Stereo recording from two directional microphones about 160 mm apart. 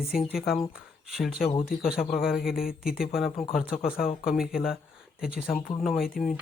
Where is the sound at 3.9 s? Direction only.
65° left (ahead or behind).